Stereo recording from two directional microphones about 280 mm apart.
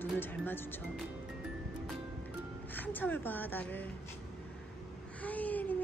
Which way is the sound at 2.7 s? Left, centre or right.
Centre.